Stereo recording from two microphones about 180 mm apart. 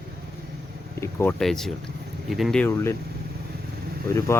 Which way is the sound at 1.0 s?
15° left (ahead or behind).